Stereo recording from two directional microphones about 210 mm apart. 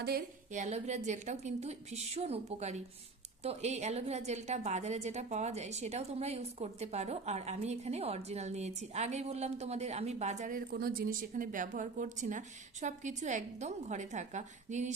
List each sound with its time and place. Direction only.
0.5 s a woman's voice: 35° right (ahead or behind)
10.7 s a woman's voice: 45° right (ahead or behind)